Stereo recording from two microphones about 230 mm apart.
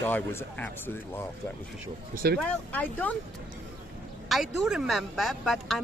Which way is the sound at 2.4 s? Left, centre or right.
Centre.